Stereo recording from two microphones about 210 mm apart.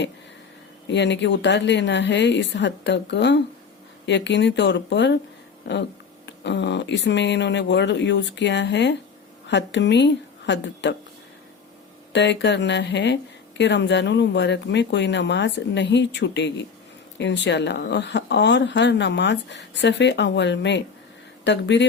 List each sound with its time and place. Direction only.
0.9 s speech: 55° left (ahead or behind)
12.1 s speech: 55° left (ahead or behind)